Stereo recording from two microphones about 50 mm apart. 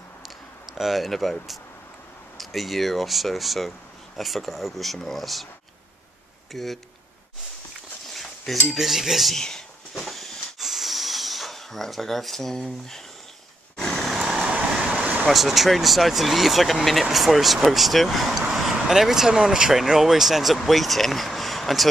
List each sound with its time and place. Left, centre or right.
0.2 s a sound: centre
2.3 s speech: centre
6.5 s speech: centre
8.1 s cutlery: centre
8.6 s speech: centre
9.3 s a sound: centre
14.1 s vehicle: centre
15.2 s speech: centre